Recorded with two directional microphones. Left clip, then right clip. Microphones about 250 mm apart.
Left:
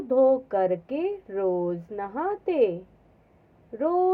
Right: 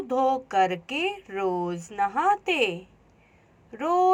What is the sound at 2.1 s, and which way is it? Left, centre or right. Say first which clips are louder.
Speech: right 3 dB; right.